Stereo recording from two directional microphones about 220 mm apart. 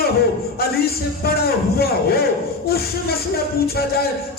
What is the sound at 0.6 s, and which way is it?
A man's voice, 45° left (ahead or behind).